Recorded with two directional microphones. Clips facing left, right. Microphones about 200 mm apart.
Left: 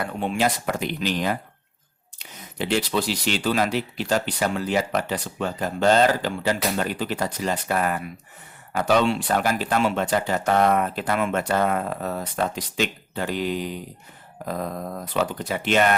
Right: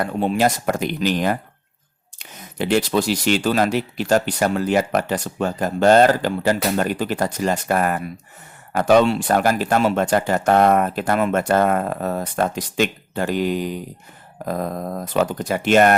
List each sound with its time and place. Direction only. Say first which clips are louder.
0.0 s speech: right 5 dB; 40° right (ahead or behind)